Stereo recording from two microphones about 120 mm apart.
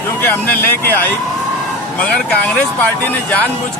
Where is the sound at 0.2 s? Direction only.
15° left (ahead or behind).